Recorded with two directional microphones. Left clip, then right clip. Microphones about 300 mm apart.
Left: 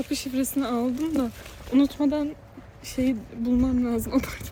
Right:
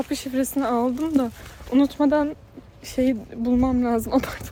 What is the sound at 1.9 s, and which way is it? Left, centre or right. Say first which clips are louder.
Speech: right 5 dB; centre.